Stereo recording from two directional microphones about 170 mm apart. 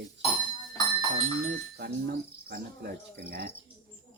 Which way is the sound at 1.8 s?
65° right (ahead or behind).